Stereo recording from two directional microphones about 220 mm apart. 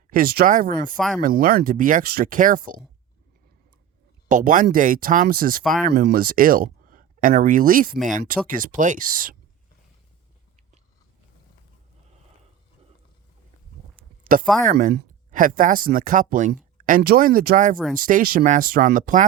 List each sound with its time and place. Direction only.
0.1 s speech: 40° right (ahead or behind)
0.9 s speech: 5° left (ahead or behind)
1.2 s speech: 40° right (ahead or behind)
4.3 s speech: 35° right (ahead or behind)
14.6 s speech: 35° right (ahead or behind)